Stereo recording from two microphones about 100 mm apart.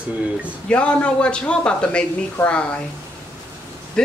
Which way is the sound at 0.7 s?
10° left (ahead or behind).